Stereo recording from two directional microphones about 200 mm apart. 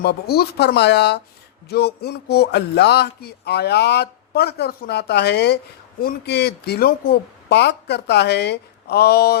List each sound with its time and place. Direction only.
0.0 s speech: 55° left (ahead or behind)